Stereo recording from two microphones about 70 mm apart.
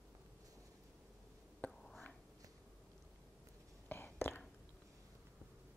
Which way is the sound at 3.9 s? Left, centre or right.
Left.